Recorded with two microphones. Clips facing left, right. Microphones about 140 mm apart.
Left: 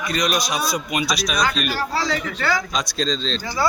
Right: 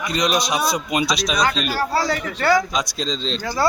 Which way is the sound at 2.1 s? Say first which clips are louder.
Right 3 dB; 45° right (ahead or behind).